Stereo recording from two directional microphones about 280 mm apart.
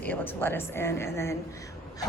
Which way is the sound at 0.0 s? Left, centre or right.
Centre.